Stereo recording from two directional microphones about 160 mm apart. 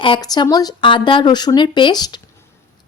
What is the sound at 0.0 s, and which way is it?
A woman's voice, 30° left (ahead or behind).